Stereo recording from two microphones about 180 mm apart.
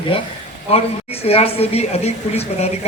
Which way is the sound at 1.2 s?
35° left (ahead or behind).